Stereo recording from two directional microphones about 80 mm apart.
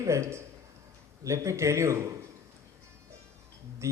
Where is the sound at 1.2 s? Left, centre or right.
Right.